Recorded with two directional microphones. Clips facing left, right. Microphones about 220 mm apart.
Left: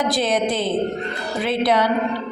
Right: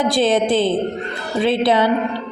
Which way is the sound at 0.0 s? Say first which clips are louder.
Right 4 dB; 30° right (ahead or behind).